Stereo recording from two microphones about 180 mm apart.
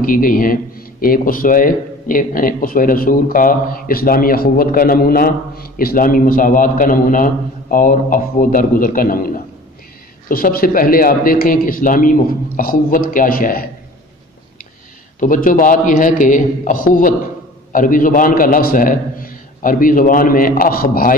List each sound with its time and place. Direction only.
0.0 s a man's voice: 50° left (ahead or behind)
15.1 s a man's voice: 45° left (ahead or behind)